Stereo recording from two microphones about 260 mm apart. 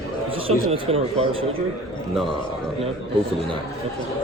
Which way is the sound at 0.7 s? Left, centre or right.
Right.